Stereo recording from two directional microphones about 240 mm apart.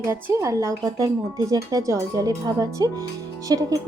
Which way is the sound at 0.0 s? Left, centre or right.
Centre.